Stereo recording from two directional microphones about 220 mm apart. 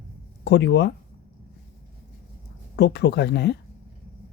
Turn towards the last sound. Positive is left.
turn(degrees=50)  # may be behind; listen again after turning